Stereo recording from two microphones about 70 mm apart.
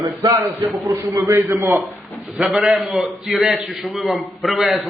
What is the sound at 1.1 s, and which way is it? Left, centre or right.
Speech, right.